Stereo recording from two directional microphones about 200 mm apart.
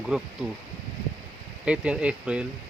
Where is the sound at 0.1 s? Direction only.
Centre (ahead or behind).